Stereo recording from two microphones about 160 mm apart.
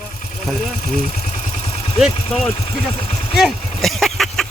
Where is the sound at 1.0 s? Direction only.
45° left (ahead or behind).